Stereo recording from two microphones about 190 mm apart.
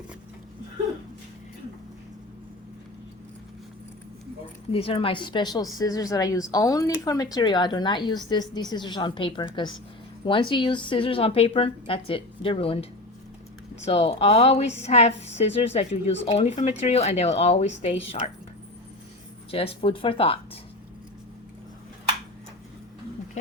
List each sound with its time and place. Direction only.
4.7 s a woman's voice: 30° left (ahead or behind)
19.5 s speech: 30° left (ahead or behind)